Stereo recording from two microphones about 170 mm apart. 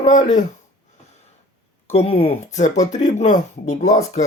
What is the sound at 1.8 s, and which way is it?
Speech, 35° left (ahead or behind).